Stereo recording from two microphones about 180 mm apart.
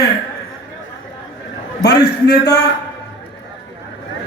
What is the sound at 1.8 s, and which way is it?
Speech, 65° left (ahead or behind).